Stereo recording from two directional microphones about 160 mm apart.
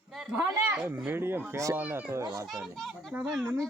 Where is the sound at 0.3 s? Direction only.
15° right (ahead or behind).